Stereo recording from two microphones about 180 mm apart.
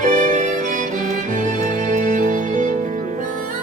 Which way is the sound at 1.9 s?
45° right (ahead or behind).